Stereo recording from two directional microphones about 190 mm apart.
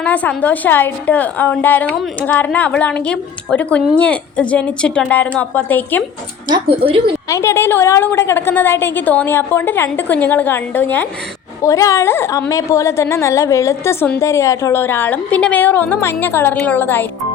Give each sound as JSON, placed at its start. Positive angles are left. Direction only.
{"t": 0.0, "sound": "a woman's voice", "side_deg": 10}
{"t": 6.5, "sound": "a woman's voice", "side_deg": -25}
{"t": 7.3, "sound": "a woman's voice", "side_deg": 15}